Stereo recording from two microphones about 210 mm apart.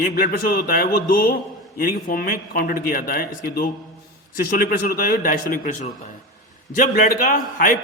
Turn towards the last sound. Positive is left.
turn(degrees=40)  # may be behind; listen again after turning